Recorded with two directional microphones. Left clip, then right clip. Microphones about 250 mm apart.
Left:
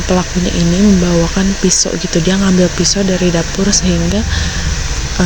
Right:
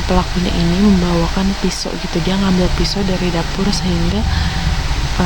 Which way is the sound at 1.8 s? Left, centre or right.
Centre.